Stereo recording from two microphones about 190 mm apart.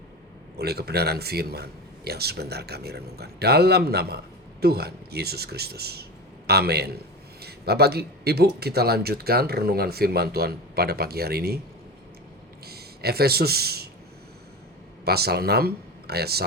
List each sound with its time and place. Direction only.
0.6 s speech: 55° right (ahead or behind)
12.6 s speech: 55° right (ahead or behind)
15.0 s speech: 55° right (ahead or behind)